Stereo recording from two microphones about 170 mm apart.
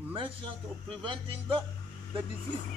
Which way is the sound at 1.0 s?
30° right (ahead or behind).